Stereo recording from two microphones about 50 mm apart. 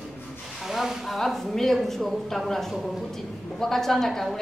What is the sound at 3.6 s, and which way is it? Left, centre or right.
Speech, centre.